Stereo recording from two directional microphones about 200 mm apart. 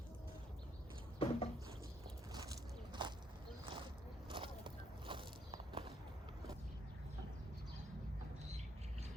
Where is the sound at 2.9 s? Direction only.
25° right (ahead or behind).